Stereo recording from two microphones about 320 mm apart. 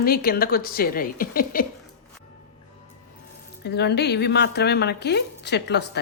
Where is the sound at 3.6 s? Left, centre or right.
Left.